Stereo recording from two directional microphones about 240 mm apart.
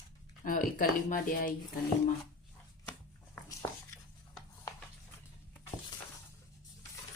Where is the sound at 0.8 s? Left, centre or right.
Left.